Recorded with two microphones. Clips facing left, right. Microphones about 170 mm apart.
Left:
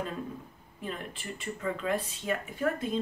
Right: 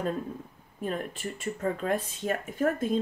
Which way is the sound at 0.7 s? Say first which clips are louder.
Right 6 dB; 45° right (ahead or behind).